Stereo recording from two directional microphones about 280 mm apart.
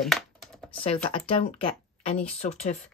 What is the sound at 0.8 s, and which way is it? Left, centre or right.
A woman's voice, centre.